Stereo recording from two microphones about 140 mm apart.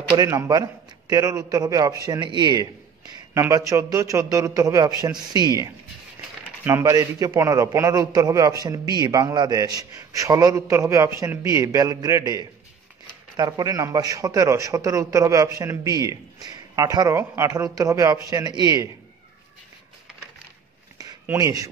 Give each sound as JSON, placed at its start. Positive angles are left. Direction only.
{"t": 0.2, "sound": "a man's voice", "side_deg": -25}
{"t": 21.3, "sound": "a man's voice", "side_deg": -25}